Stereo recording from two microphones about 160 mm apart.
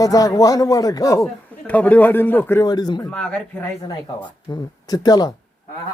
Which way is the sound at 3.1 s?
5° left (ahead or behind).